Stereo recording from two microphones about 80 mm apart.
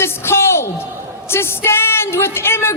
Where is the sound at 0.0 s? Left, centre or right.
Left.